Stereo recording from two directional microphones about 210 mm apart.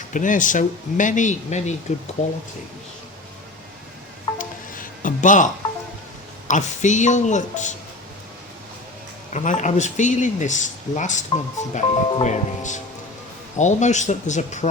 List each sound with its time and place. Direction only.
0.1 s speech: 40° left (ahead or behind)
4.4 s music: 40° left (ahead or behind)
6.5 s speech: 35° left (ahead or behind)
9.3 s speech: 35° left (ahead or behind)